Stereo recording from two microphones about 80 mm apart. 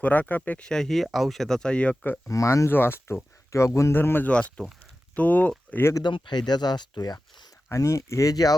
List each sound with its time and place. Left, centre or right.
0.0 s speech: left
0.7 s speech: centre
2.2 s speech: left
2.7 s speech: left
3.5 s speech: left
3.9 s speech: left
4.3 s speech: centre
5.9 s speech: left
7.7 s speech: left